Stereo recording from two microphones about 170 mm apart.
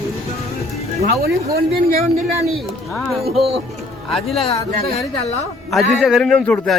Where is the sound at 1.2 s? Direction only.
65° right (ahead or behind).